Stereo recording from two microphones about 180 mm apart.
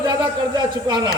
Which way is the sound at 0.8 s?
25° right (ahead or behind).